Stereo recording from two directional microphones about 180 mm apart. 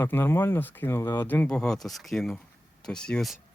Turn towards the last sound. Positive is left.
turn(degrees=0)  # may be behind; listen again after turning